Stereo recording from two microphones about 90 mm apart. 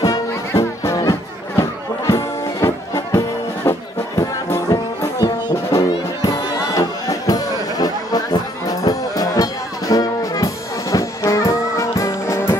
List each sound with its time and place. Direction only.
0.0 s music: 40° left (ahead or behind)